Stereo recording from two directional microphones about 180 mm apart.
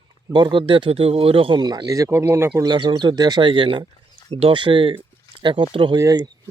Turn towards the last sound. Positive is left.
turn(degrees=-20)  # may be behind; listen again after turning